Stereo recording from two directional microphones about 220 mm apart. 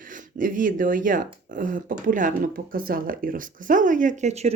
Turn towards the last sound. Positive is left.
turn(degrees=-30)  # may be behind; listen again after turning